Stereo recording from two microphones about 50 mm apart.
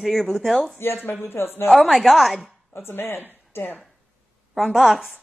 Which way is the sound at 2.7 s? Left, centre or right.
Left.